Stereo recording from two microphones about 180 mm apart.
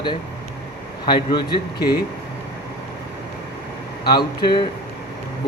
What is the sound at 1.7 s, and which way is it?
Speech, 60° left (ahead or behind).